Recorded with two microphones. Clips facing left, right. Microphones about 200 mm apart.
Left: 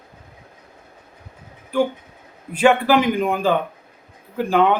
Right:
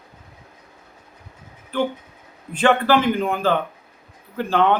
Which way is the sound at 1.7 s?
10° left (ahead or behind).